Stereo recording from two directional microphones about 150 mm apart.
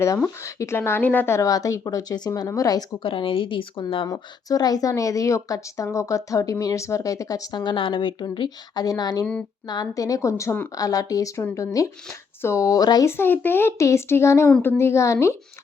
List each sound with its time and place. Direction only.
0.4 s a woman's voice: 20° left (ahead or behind); by 4.0 s 35° left (ahead or behind)
4.0 s a woman's voice: 25° left (ahead or behind)